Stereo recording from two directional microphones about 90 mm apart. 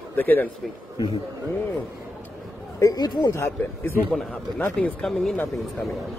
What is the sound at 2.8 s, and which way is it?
Speech, 50° left (ahead or behind).